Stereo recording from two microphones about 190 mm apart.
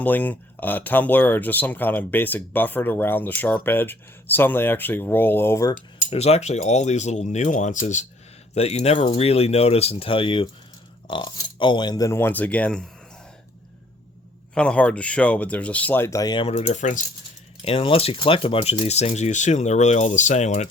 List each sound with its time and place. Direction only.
0.0 s speech: 10° left (ahead or behind)
6.1 s speech: 35° left (ahead or behind); by 12.9 s 5° left (ahead or behind)
14.5 s speech: 5° left (ahead or behind); by 17.0 s 40° left (ahead or behind)
17.6 s speech: 30° left (ahead or behind)